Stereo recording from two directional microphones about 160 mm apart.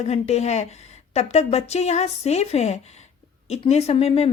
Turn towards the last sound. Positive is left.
turn(degrees=40)  # may be behind; listen again after turning